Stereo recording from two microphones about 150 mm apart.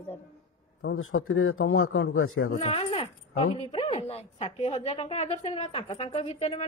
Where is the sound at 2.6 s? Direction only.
40° left (ahead or behind).